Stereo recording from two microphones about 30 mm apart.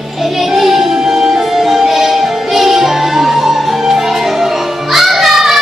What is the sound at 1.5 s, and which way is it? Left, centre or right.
Music, centre.